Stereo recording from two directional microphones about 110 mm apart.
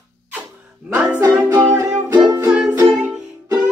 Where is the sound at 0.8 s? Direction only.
10° right (ahead or behind).